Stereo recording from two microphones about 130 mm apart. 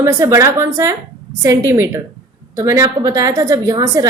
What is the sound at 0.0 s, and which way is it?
A woman's voice, 20° right (ahead or behind).